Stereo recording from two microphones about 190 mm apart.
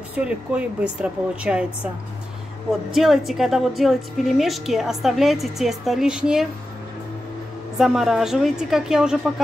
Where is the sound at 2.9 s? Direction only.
Centre (ahead or behind).